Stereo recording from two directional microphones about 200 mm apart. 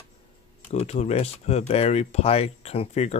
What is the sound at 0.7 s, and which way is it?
Speech, 35° left (ahead or behind).